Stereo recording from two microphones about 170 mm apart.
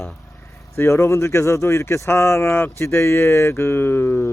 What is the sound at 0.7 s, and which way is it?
Speech, 15° left (ahead or behind).